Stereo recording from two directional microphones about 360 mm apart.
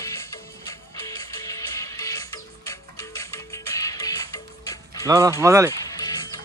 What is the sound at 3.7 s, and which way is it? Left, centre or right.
Music, centre.